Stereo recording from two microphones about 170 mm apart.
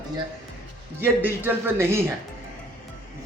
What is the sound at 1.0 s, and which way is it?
Speech, 15° right (ahead or behind).